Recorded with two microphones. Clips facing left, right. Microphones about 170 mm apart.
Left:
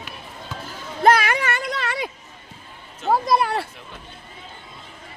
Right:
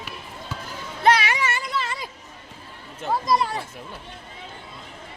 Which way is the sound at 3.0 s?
60° left (ahead or behind).